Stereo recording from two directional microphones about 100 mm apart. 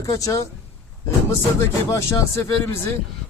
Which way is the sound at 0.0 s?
35° left (ahead or behind).